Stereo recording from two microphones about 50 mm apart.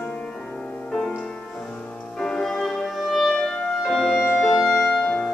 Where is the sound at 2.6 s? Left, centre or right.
Centre.